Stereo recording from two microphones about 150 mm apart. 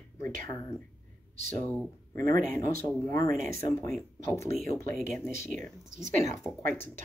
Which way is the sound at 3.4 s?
70° right (ahead or behind).